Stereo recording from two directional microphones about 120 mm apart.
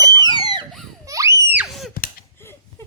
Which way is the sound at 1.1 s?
25° right (ahead or behind).